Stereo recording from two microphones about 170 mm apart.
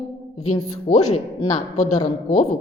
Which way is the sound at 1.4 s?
40° left (ahead or behind).